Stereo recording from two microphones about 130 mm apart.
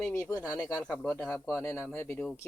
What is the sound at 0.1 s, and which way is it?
Speech, 25° left (ahead or behind).